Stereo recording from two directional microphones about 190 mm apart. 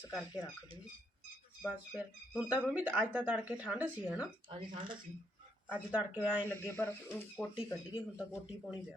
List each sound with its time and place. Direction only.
0.0 s speech: 5° right (ahead or behind)
1.7 s speech: 5° right (ahead or behind)
4.4 s speech: 25° right (ahead or behind)
5.6 s speech: 5° right (ahead or behind)
6.5 s speech: 10° left (ahead or behind)
7.3 s speech: 5° right (ahead or behind)